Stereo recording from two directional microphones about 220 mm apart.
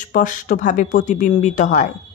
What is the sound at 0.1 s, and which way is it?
Speech, 35° left (ahead or behind).